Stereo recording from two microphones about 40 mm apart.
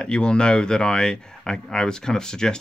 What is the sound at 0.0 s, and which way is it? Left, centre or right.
Speech, left.